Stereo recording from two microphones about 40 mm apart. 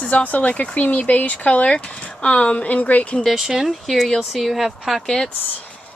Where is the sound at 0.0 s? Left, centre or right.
Left.